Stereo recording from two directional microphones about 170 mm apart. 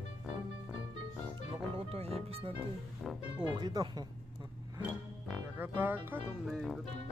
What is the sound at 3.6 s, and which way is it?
Speech, 20° right (ahead or behind).